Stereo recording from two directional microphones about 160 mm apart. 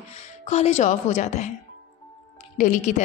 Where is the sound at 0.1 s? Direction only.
45° left (ahead or behind).